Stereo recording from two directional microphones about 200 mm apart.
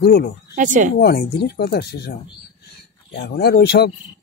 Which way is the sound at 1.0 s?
50° left (ahead or behind).